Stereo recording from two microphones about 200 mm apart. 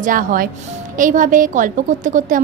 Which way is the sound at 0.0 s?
45° right (ahead or behind).